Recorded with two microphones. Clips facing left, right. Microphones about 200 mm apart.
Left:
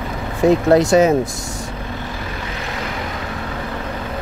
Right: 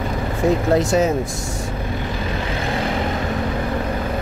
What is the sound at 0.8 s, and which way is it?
Speech, 70° left (ahead or behind).